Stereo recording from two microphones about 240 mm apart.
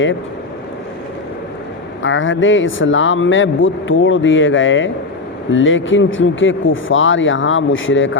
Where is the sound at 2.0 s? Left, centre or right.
Left.